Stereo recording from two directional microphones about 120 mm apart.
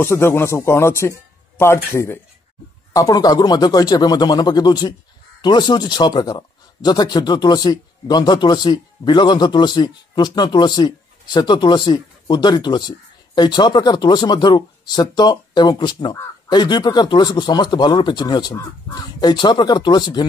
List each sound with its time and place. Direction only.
0.0 s speech: 20° left (ahead or behind)
2.9 s speech: 30° left (ahead or behind)